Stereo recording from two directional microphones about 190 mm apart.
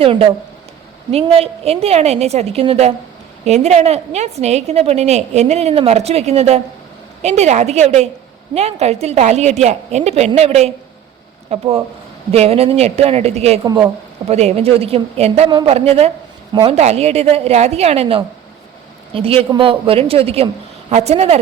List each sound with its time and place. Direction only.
0.0 s a woman's voice: 30° right (ahead or behind)
13.7 s a woman's voice: 20° right (ahead or behind)
14.3 s a woman's voice: 35° right (ahead or behind)